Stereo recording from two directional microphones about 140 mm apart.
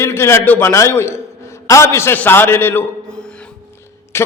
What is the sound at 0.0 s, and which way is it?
A man's voice, 20° left (ahead or behind).